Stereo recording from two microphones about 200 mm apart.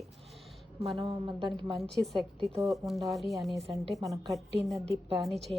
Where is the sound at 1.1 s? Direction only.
25° right (ahead or behind).